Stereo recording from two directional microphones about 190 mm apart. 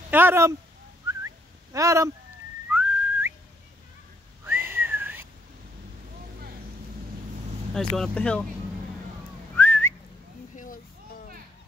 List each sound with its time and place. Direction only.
0.1 s speech: 10° right (ahead or behind)
1.0 s whistling: 15° right (ahead or behind)
4.5 s whistling: 10° right (ahead or behind)
7.7 s speech: centre (ahead or behind)
9.6 s whistling: 10° left (ahead or behind)
10.5 s a sound: 45° left (ahead or behind)